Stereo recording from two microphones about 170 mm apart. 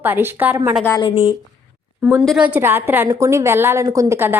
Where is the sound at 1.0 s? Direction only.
35° left (ahead or behind).